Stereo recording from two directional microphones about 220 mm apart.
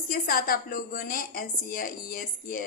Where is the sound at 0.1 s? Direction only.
40° left (ahead or behind).